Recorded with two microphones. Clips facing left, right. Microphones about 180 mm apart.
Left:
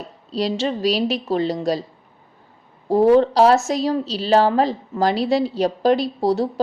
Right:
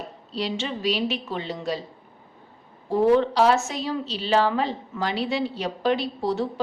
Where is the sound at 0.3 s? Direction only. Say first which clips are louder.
Left 7 dB; 35° left (ahead or behind).